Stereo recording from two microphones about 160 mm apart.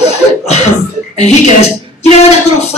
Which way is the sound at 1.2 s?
45° left (ahead or behind).